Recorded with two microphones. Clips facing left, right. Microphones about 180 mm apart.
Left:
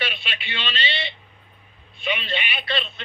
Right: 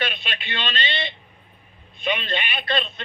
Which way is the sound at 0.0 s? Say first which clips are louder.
Right 2 dB; 45° right (ahead or behind).